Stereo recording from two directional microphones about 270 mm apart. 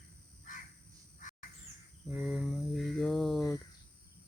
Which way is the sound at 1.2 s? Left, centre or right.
Left.